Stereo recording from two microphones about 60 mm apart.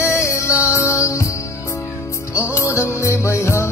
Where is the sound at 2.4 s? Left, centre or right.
Left.